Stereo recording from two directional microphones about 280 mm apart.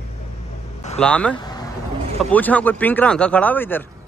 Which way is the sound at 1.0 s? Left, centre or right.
Centre.